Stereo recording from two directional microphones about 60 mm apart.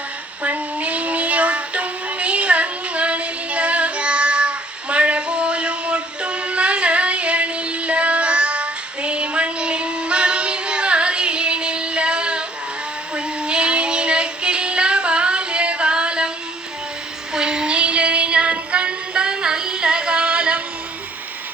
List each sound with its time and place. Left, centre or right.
0.4 s child singing: right
17.3 s music: centre